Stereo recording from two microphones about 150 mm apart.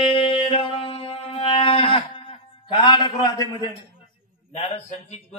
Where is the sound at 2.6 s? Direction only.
30° left (ahead or behind).